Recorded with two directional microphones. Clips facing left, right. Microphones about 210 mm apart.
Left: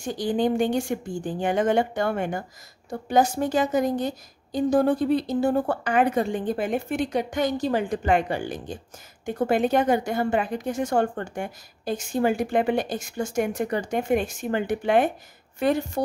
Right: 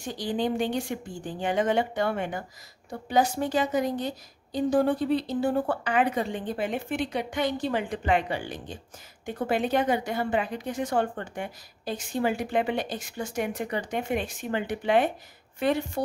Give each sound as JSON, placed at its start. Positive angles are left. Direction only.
{"t": 0.0, "sound": "a woman's voice", "side_deg": 50}